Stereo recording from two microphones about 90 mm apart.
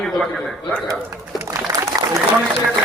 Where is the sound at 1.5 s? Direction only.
35° right (ahead or behind).